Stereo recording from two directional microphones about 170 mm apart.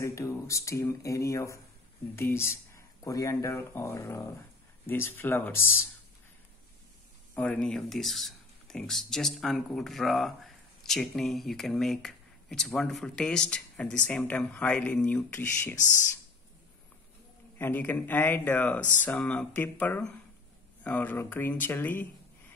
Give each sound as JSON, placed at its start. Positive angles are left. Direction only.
{"t": 0.0, "sound": "speech", "side_deg": 20}
{"t": 7.3, "sound": "speech", "side_deg": 5}
{"t": 17.6, "sound": "speech", "side_deg": 10}